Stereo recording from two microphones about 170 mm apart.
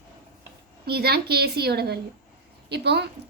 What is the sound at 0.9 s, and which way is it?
A woman's voice, 70° right (ahead or behind).